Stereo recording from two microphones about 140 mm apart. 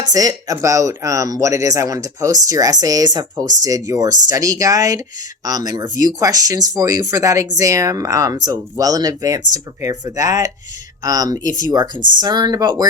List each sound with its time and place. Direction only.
0.1 s speech: 25° right (ahead or behind)